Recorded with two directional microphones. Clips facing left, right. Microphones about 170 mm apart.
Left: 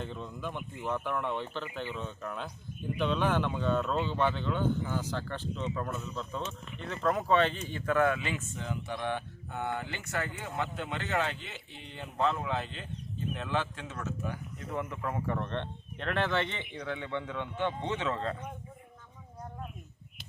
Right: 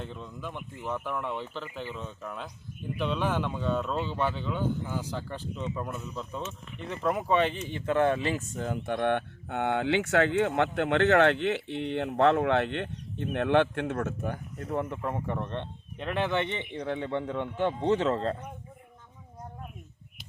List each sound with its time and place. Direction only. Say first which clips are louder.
0.0 s speech: left 1 dB; centre (ahead or behind); by 14.7 s 55° right (ahead or behind)
14.7 s speech: right 5 dB; 35° right (ahead or behind)
15.0 s speech: right 1 dB; 20° right (ahead or behind)
16.8 s speech: right 4 dB; 35° right (ahead or behind)